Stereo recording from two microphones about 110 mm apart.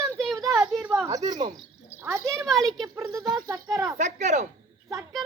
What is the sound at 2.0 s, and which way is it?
Speech, 25° right (ahead or behind).